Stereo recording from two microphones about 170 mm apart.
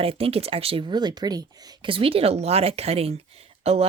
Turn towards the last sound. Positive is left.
turn(degrees=-35)  # may be behind; listen again after turning